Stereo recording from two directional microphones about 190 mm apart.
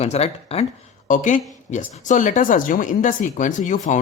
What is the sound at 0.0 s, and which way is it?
Speech, 35° left (ahead or behind).